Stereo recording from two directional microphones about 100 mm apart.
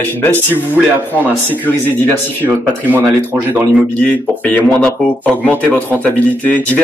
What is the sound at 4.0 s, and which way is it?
Speech, 15° left (ahead or behind).